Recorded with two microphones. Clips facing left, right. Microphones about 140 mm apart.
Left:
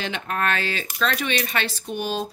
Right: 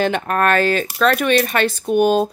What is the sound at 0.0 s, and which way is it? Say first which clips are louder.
Speech: right 9 dB; 50° right (ahead or behind).